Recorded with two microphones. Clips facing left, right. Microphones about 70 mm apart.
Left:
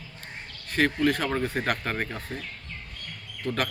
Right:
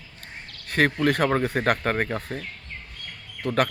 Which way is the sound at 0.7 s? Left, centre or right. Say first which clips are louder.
Right 2 dB; right.